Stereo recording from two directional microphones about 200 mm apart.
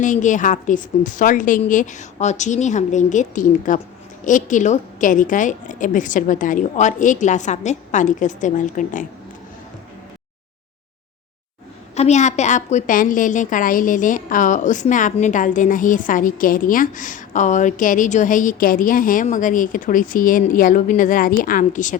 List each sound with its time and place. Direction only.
0.0 s a woman's voice: 40° left (ahead or behind)
11.9 s a woman's voice: 35° left (ahead or behind)